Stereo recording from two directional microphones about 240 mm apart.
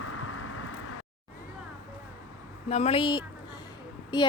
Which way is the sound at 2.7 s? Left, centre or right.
Left.